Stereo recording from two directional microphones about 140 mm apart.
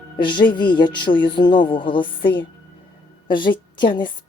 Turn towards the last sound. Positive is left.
turn(degrees=35)  # may be behind; listen again after turning